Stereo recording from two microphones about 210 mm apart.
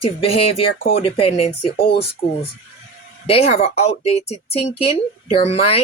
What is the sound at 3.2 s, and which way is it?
Speech, 30° left (ahead or behind).